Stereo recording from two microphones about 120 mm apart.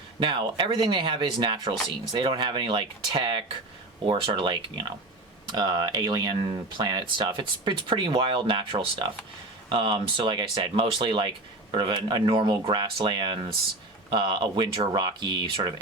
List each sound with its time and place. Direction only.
0.2 s speech: 40° right (ahead or behind)